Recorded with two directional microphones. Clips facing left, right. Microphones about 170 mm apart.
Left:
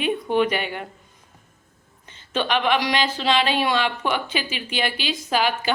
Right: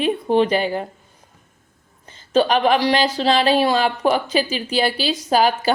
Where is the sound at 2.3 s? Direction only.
35° right (ahead or behind).